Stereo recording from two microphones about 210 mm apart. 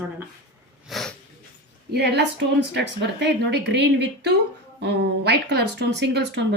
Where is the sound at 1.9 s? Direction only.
50° right (ahead or behind).